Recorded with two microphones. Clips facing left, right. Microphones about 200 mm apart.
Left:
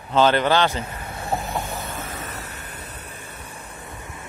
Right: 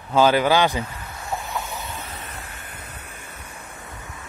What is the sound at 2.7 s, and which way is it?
Vehicle, 30° left (ahead or behind).